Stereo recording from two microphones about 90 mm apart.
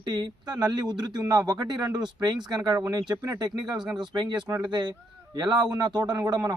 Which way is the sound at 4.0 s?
60° right (ahead or behind).